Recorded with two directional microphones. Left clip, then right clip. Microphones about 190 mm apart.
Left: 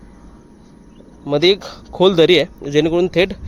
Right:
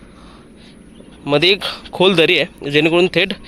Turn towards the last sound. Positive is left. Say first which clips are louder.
# right 1 dB
turn(degrees=5)  # may be behind; listen again after turning